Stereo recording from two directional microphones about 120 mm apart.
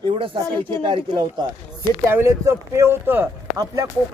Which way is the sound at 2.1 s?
20° right (ahead or behind).